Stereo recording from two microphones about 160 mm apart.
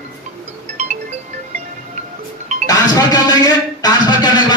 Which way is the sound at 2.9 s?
25° left (ahead or behind).